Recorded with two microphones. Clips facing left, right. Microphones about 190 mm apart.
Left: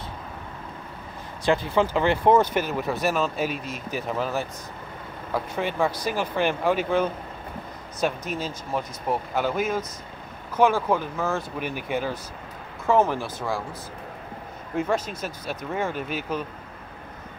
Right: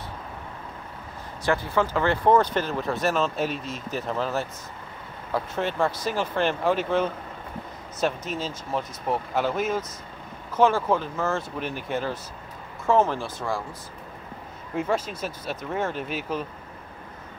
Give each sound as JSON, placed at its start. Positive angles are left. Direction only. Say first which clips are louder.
{"t": 1.4, "sound": "speech", "louder": "left 2 dB", "side_deg": 15}
{"t": 13.2, "sound": "speech", "louder": "left 1 dB", "side_deg": 5}
{"t": 14.8, "sound": "speech", "louder": "left 1 dB", "side_deg": -5}